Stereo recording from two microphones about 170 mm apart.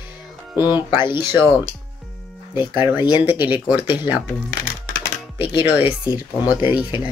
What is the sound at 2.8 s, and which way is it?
Speech, 10° right (ahead or behind).